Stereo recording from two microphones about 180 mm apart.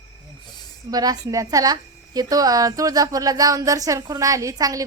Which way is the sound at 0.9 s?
20° right (ahead or behind).